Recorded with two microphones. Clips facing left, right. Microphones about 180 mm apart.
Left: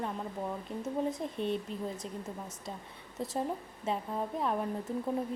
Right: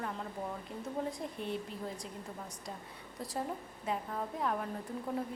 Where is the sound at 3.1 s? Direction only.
25° left (ahead or behind).